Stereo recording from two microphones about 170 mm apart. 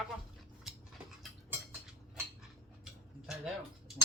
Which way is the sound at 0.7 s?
Centre (ahead or behind).